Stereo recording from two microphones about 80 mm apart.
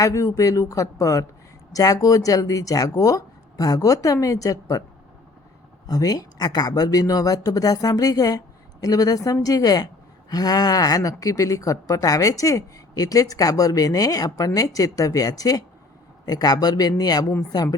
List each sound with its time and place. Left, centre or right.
0.0 s speech: left
5.9 s speech: left